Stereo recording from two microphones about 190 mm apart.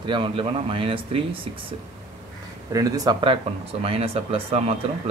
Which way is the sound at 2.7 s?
20° right (ahead or behind).